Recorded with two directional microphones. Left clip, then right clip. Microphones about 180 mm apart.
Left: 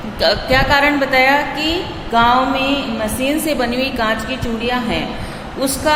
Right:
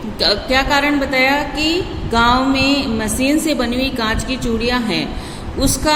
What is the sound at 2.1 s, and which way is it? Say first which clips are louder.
A woman's voice: left 1 dB; 30° right (ahead or behind).